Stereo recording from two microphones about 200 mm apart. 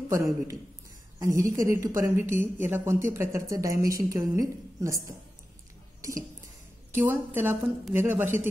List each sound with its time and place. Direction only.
1.2 s a woman's voice: 15° right (ahead or behind)
5.9 s dishes: 15° right (ahead or behind)
6.9 s a woman's voice: 10° right (ahead or behind)